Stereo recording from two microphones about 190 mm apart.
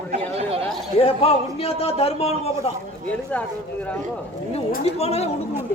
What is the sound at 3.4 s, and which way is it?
Speech, 5° left (ahead or behind).